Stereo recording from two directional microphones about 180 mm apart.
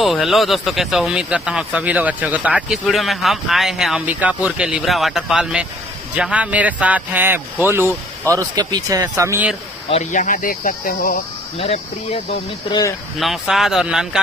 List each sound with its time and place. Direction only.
0.0 s speech: centre (ahead or behind)
9.8 s speech: 40° left (ahead or behind)
13.2 s speech: centre (ahead or behind)